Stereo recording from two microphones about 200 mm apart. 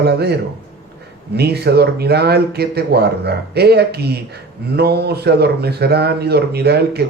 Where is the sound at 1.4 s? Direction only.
55° right (ahead or behind).